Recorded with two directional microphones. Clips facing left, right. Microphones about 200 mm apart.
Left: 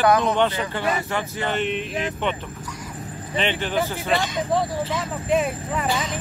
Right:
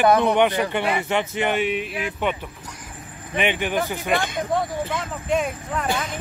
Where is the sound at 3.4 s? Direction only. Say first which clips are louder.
Right 1 dB; 15° right (ahead or behind).